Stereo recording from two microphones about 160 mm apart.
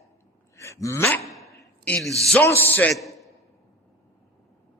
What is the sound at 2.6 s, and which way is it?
Speech, 10° left (ahead or behind).